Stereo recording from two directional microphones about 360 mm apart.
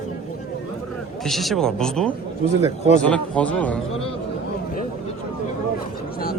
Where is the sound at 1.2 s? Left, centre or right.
Centre.